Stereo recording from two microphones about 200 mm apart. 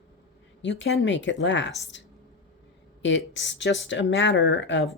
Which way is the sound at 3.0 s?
65° left (ahead or behind).